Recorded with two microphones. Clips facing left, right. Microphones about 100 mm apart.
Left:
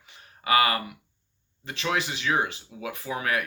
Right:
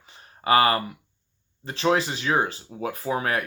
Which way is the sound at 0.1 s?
35° right (ahead or behind).